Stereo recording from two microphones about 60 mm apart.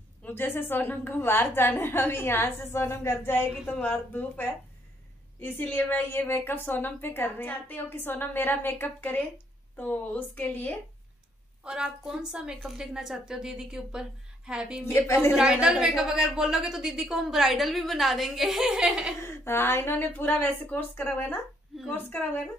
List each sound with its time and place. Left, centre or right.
0.2 s a sound: left
0.6 s a woman's voice: left
3.8 s a woman's voice: left
11.6 s a woman's voice: centre
14.9 s a woman's voice: left
15.3 s a woman's voice: centre
19.2 s a woman's voice: left